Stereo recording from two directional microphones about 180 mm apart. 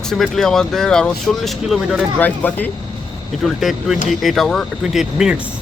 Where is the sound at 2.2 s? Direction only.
10° left (ahead or behind).